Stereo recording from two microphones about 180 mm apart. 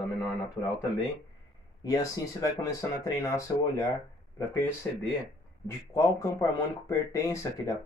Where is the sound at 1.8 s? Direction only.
20° left (ahead or behind).